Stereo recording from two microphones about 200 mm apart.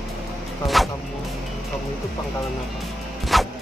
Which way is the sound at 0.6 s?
Centre (ahead or behind).